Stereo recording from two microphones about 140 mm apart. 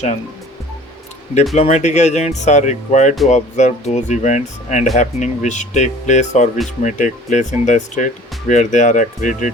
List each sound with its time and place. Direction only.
1.5 s speech: 55° left (ahead or behind)